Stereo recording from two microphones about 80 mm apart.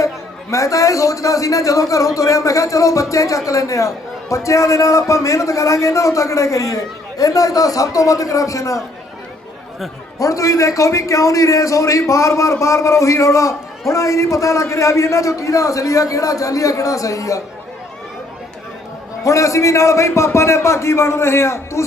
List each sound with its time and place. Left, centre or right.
0.5 s a man's voice: left
10.2 s a man's voice: left
19.2 s a man's voice: left